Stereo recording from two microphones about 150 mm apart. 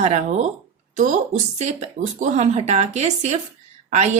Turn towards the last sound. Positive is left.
turn(degrees=-50)  # may be behind; listen again after turning